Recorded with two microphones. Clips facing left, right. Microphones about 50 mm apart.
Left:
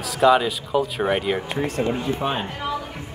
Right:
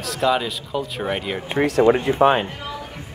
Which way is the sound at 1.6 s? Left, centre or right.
Right.